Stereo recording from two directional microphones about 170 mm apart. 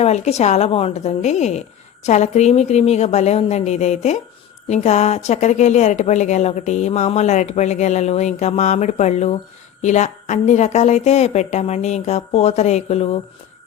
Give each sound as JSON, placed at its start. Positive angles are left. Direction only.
{"t": 0.0, "sound": "a woman's voice", "side_deg": 40}